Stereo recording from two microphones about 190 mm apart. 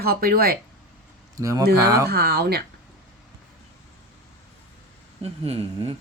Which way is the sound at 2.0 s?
55° right (ahead or behind).